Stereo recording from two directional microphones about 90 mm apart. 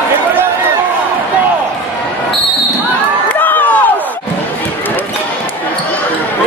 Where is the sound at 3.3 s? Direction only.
20° left (ahead or behind).